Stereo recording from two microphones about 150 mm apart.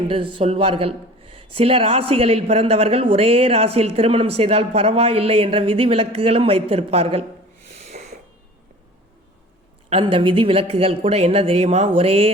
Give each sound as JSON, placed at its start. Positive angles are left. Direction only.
{"t": 0.1, "sound": "speech", "side_deg": -40}
{"t": 7.9, "sound": "a sound", "side_deg": -80}
{"t": 9.9, "sound": "speech", "side_deg": -40}